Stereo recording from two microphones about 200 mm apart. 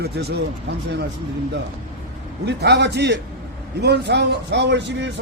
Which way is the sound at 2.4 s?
55° right (ahead or behind).